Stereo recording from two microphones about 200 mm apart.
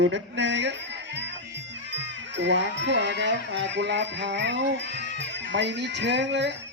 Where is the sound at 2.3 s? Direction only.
60° right (ahead or behind).